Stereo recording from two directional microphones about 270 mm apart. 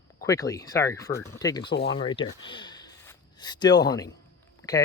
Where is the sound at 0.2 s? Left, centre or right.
Centre.